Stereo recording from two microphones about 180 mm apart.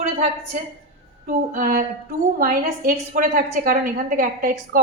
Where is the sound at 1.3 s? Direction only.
55° right (ahead or behind).